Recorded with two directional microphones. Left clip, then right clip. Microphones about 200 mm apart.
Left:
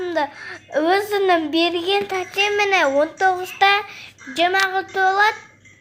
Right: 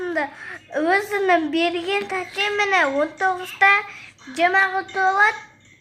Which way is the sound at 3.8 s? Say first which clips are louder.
Even; 20° left (ahead or behind).